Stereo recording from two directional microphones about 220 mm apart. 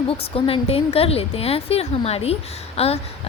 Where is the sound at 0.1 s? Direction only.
25° left (ahead or behind).